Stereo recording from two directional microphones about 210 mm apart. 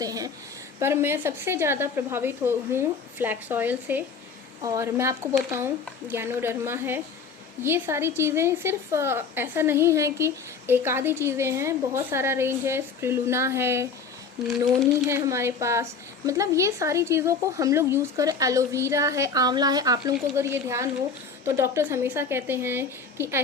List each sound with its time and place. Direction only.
0.0 s a woman's voice: 15° right (ahead or behind)
15.0 s a woman's voice: 15° right (ahead or behind)